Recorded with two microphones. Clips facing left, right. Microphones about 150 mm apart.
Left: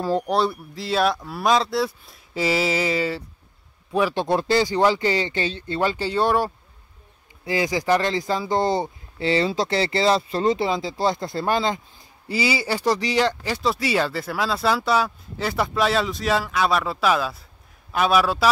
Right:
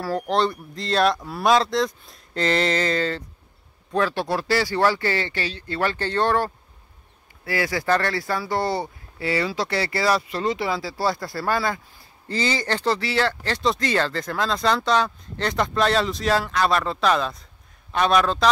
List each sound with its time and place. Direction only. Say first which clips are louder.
0.3 s speech: even; 5° left (ahead or behind)